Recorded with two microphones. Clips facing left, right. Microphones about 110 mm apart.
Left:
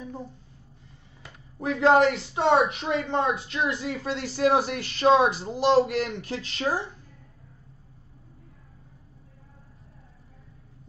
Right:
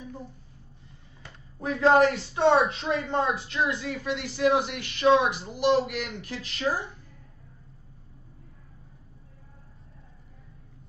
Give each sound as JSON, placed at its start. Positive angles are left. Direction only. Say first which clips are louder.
{"t": 1.6, "sound": "speech", "louder": "left 1 dB", "side_deg": 20}